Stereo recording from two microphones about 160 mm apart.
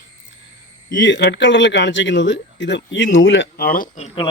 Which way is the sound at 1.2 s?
90° left.